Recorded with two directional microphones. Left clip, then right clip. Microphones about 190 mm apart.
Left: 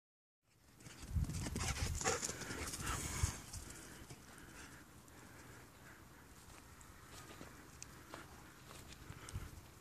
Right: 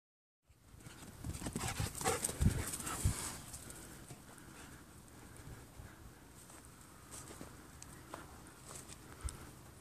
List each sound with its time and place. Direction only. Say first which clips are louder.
0.8 s clip-clop: left 1 dB; centre (ahead or behind)
2.0 s dog: right 3 dB; 15° right (ahead or behind)
2.8 s dog: even; 5° left (ahead or behind)